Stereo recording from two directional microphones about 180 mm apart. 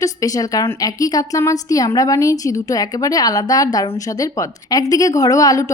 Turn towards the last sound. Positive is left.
turn(degrees=20)  # may be behind; listen again after turning